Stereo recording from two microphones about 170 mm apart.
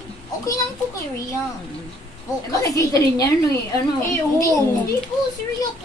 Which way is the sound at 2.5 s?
20° left (ahead or behind).